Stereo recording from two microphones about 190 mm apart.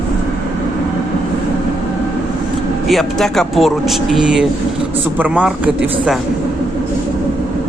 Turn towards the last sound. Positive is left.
turn(degrees=-5)  # may be behind; listen again after turning